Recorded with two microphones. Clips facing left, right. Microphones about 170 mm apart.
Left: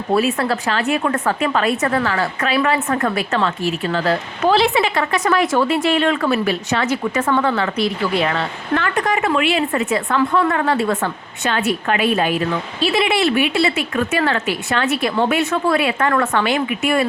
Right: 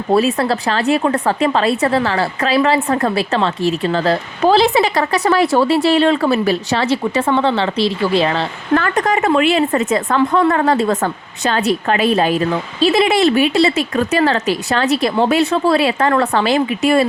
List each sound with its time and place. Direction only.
0.1 s a woman's voice: 35° right (ahead or behind)
8.7 s a woman's voice: 40° right (ahead or behind)